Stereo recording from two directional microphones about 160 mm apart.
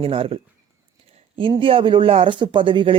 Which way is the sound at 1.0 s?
35° right (ahead or behind).